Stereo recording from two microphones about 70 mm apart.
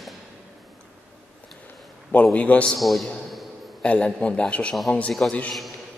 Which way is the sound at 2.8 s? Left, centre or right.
Centre.